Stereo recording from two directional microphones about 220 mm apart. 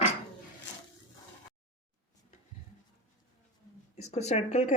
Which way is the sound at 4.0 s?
30° left (ahead or behind).